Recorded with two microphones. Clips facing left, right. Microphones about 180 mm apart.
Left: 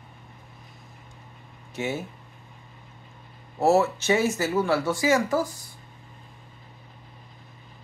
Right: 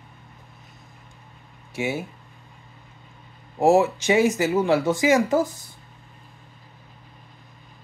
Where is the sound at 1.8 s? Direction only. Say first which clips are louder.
Right 3 dB; 10° right (ahead or behind).